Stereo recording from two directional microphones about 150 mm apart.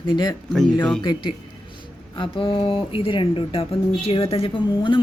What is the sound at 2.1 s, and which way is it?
Speech, 35° left (ahead or behind).